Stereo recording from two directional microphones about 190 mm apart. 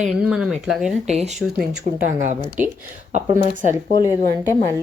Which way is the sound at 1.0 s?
35° right (ahead or behind).